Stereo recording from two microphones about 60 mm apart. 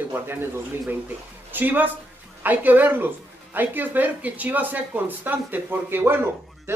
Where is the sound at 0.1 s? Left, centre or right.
Right.